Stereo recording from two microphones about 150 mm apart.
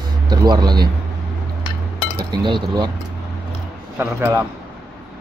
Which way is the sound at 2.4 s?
30° right (ahead or behind).